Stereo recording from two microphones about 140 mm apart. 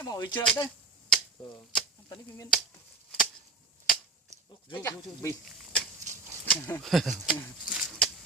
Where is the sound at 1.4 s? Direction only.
35° left (ahead or behind).